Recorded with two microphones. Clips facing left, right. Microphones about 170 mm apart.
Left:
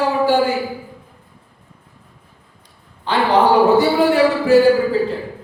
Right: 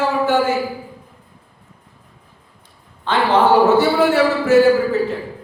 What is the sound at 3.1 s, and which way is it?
A man's voice, 15° left (ahead or behind).